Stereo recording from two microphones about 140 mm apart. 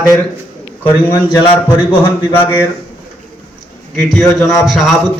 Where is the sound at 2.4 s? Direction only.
15° left (ahead or behind).